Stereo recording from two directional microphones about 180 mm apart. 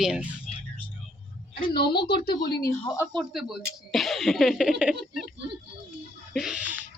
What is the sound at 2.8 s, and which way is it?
Speech, 15° left (ahead or behind).